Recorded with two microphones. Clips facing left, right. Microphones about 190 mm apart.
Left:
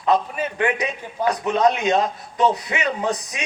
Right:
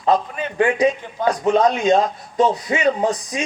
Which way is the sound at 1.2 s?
30° right (ahead or behind).